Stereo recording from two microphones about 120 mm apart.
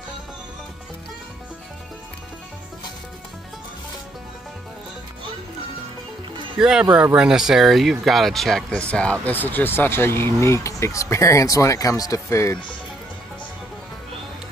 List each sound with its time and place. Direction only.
6.6 s speech: 5° right (ahead or behind); by 12.5 s 25° left (ahead or behind)